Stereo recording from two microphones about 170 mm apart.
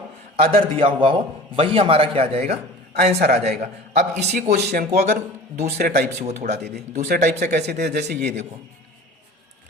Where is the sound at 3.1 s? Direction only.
75° right (ahead or behind).